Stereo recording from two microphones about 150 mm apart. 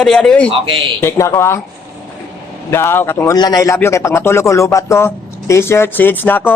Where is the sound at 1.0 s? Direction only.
20° left (ahead or behind).